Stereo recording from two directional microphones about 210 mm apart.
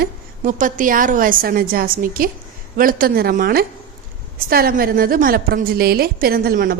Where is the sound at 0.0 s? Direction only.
40° right (ahead or behind).